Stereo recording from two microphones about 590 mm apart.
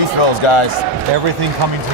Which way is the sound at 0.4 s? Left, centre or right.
Left.